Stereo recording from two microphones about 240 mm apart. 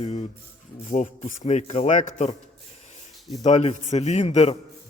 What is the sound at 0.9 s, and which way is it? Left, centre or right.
Speech, left.